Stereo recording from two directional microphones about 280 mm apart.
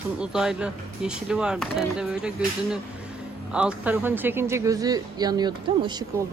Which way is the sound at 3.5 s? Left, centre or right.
Centre.